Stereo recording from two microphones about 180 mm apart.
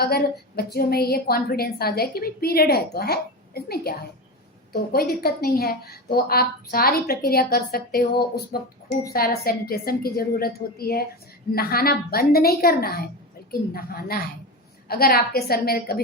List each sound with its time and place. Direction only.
0.0 s a woman's voice: 60° left (ahead or behind)